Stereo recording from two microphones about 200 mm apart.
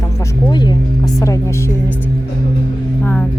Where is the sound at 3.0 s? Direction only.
10° left (ahead or behind).